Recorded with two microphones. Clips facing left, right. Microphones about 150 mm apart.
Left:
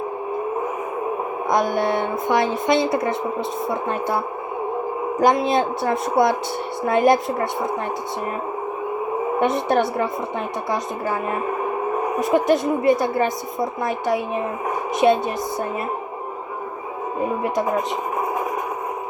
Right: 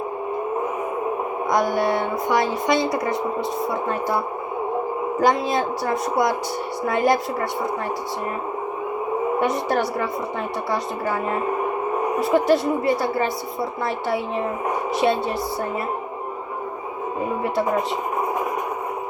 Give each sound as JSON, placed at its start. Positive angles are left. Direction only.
{"t": 1.5, "sound": "a woman's voice", "side_deg": 20}
{"t": 5.2, "sound": "a woman's voice", "side_deg": 20}
{"t": 9.4, "sound": "a woman's voice", "side_deg": 20}
{"t": 12.2, "sound": "a woman's voice", "side_deg": 20}